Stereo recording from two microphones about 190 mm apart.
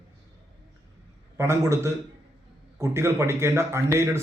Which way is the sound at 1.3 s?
15° right (ahead or behind).